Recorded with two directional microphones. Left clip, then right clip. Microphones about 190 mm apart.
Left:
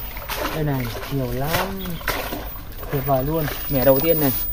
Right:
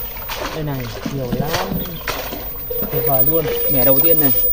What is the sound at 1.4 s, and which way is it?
Speech, 10° right (ahead or behind).